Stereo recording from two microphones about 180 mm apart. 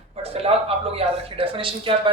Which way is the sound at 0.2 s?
35° right (ahead or behind).